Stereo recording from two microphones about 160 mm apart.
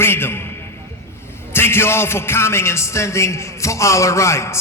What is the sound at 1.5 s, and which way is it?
A man's voice, 15° left (ahead or behind).